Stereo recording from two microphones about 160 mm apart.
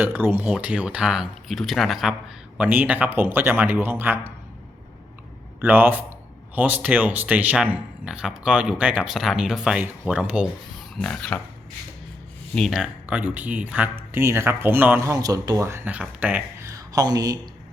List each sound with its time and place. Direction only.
0.0 s speech: 15° right (ahead or behind)
5.5 s a man's voice: 10° right (ahead or behind)
10.9 s speech: 5° left (ahead or behind)
12.5 s speech: centre (ahead or behind)
16.7 s speech: 25° right (ahead or behind)